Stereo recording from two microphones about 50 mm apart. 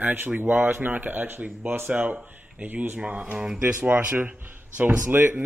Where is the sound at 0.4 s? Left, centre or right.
Right.